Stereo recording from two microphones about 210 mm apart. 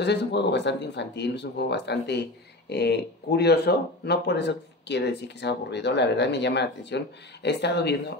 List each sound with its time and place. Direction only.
0.0 s speech: 55° left (ahead or behind)